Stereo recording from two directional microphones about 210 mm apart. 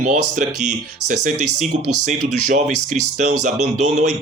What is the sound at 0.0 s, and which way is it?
Speech, 40° right (ahead or behind).